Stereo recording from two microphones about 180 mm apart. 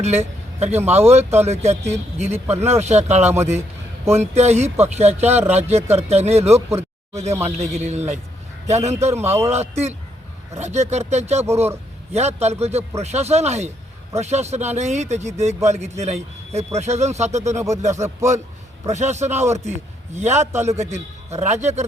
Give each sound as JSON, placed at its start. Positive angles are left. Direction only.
{"t": 0.0, "sound": "speech", "side_deg": -35}
{"t": 6.7, "sound": "a sound", "side_deg": -15}
{"t": 7.6, "sound": "speech", "side_deg": -40}
{"t": 9.2, "sound": "speech", "side_deg": -15}
{"t": 9.5, "sound": "a man's voice", "side_deg": -35}